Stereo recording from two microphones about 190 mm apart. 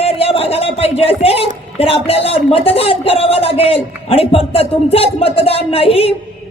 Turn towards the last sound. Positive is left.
turn(degrees=30)  # may be behind; listen again after turning